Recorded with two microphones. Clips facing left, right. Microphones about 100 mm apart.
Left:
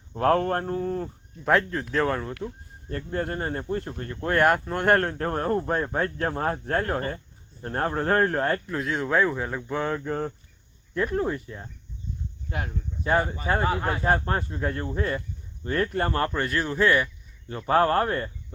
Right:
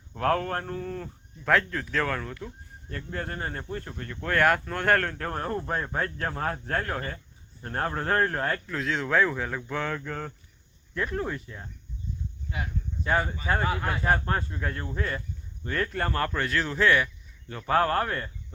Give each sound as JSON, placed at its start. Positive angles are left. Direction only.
{"t": 0.2, "sound": "speech", "side_deg": 35}
{"t": 1.5, "sound": "speech", "side_deg": 15}
{"t": 7.6, "sound": "speech", "side_deg": 20}
{"t": 8.8, "sound": "speech", "side_deg": 10}
{"t": 12.5, "sound": "speech", "side_deg": 50}
{"t": 13.1, "sound": "speech", "side_deg": 15}
{"t": 17.5, "sound": "speech", "side_deg": 25}